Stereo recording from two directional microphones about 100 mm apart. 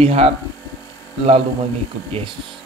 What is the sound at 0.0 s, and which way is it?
Speech, 90° right.